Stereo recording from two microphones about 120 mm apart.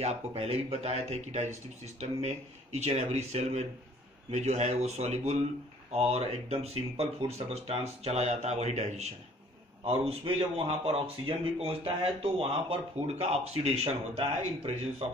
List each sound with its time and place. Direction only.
0.0 s speech: 60° right (ahead or behind)
9.8 s speech: 55° right (ahead or behind)